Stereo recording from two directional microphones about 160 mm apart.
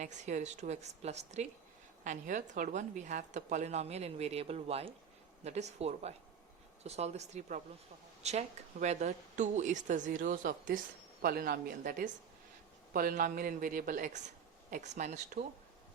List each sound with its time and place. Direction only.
0.0 s a woman's voice: 50° right (ahead or behind)